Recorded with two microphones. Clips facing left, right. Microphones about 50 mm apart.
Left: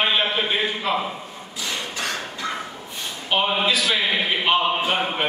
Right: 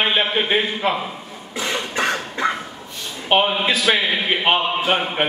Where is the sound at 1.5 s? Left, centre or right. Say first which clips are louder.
Right 6 dB; right.